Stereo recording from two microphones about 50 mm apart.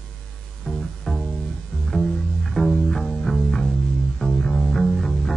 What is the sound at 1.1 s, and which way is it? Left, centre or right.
Pizzicato, centre.